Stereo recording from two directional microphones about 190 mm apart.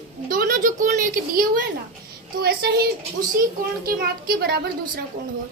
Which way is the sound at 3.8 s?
50° right (ahead or behind).